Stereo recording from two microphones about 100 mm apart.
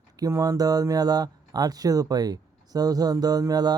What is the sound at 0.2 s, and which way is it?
Speech, 35° right (ahead or behind).